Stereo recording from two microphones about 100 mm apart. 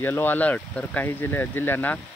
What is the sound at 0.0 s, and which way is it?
Speech, 20° left (ahead or behind).